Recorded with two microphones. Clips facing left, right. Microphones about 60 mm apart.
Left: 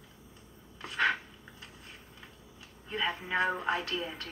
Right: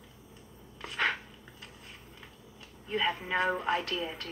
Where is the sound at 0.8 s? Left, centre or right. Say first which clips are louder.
Left 1 dB; left.